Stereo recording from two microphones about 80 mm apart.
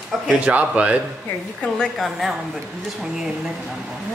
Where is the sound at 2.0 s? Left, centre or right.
Centre.